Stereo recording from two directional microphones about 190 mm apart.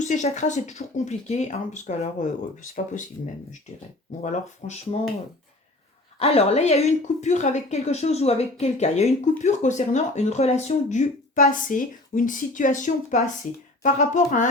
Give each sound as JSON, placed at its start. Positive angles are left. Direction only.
{"t": 0.0, "sound": "speech", "side_deg": 40}
{"t": 6.1, "sound": "speech", "side_deg": 30}